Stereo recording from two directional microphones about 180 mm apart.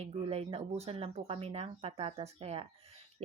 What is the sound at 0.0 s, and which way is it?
Speech, 35° right (ahead or behind).